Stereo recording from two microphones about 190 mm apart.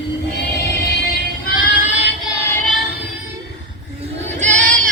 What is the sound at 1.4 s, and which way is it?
Female singing, 40° left (ahead or behind).